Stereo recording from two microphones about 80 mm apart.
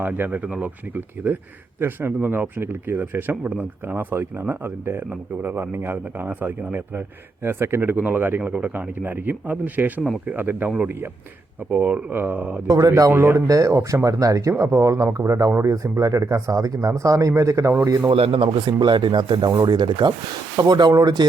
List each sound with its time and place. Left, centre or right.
0.0 s speech: right
11.7 s speech: centre
12.6 s speech: right
13.5 s speech: right
18.1 s speech: right
19.5 s speech: right
19.7 s speech: right